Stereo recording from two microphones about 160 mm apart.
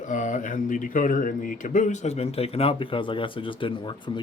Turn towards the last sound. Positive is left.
turn(degrees=30)  # may be behind; listen again after turning